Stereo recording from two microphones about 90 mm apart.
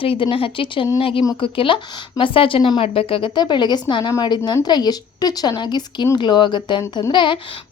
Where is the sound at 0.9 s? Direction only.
90° left.